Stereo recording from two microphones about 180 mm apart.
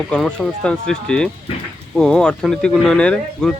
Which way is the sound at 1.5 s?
35° left (ahead or behind).